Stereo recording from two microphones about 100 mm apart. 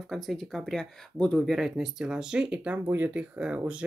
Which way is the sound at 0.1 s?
Centre (ahead or behind).